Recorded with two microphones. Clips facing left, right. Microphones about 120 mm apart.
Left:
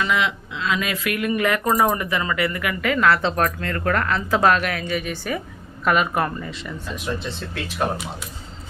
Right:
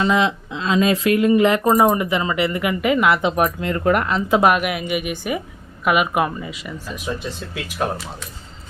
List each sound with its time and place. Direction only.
0.0 s speech: 30° right (ahead or behind); by 7.6 s 10° right (ahead or behind)